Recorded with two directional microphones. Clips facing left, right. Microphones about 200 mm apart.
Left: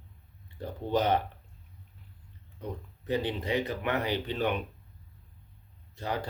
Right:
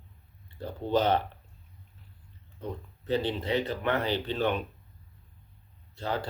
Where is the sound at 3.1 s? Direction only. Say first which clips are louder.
Right 2 dB; 15° left (ahead or behind).